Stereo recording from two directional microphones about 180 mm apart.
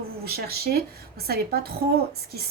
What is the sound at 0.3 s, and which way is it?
A woman's voice, 60° right (ahead or behind).